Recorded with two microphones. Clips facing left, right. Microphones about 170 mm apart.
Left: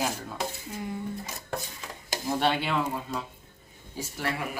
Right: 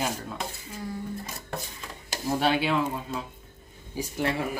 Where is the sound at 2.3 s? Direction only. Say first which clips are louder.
Right 2 dB; 5° right (ahead or behind).